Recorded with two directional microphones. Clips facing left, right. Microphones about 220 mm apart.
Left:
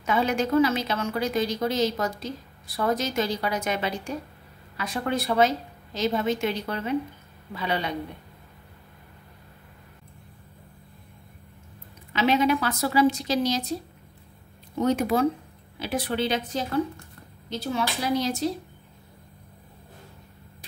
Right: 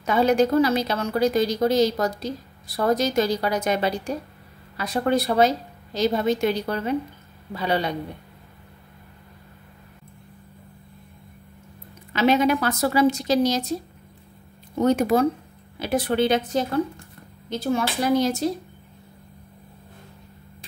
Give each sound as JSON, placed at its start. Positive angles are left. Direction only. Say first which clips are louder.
{"t": 0.0, "sound": "a woman's voice", "louder": "right 6 dB", "side_deg": -40}
{"t": 12.1, "sound": "a woman's voice", "louder": "right 3 dB", "side_deg": -45}
{"t": 14.8, "sound": "a woman's voice", "louder": "right 3 dB", "side_deg": -45}